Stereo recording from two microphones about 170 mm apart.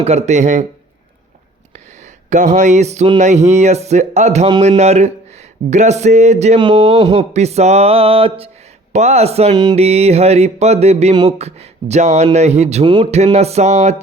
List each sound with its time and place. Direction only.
0.0 s speech: 40° right (ahead or behind)
2.0 s speech: 45° right (ahead or behind)
6.6 s speech: 25° right (ahead or behind)
7.2 s speech: 40° right (ahead or behind)